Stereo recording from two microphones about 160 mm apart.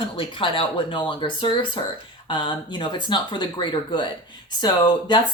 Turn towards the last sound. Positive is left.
turn(degrees=30)  # may be behind; listen again after turning